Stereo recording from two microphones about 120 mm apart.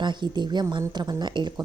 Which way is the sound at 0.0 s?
40° right (ahead or behind).